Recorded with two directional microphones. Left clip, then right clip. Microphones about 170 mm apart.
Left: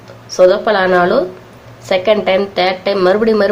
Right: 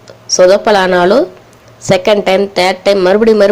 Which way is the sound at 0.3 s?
40° right (ahead or behind).